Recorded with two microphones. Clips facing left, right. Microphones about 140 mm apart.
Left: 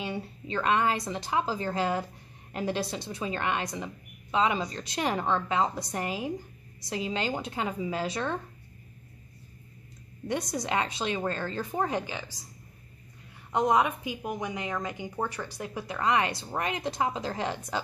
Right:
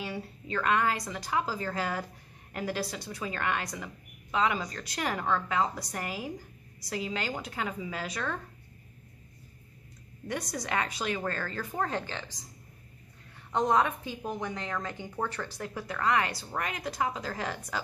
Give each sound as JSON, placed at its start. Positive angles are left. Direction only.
{"t": 0.0, "sound": "speech", "side_deg": 25}
{"t": 10.2, "sound": "speech", "side_deg": 20}
{"t": 13.5, "sound": "a woman's voice", "side_deg": 10}